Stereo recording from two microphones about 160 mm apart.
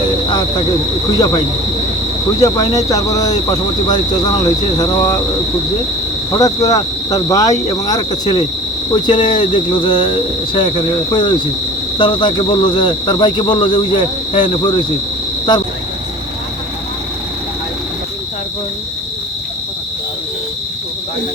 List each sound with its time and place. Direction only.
2.4 s speech: 20° left (ahead or behind)
6.3 s speech: 20° left (ahead or behind)